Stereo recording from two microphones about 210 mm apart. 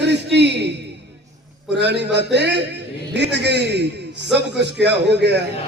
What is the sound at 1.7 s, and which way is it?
A man's voice, 55° right (ahead or behind).